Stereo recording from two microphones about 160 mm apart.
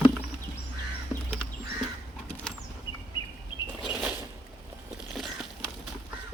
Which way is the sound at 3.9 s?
10° right (ahead or behind).